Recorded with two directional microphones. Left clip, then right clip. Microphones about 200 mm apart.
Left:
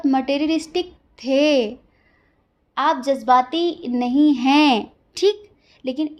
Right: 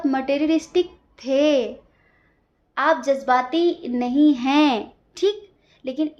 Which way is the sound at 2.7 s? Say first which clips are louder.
Even; 40° left (ahead or behind).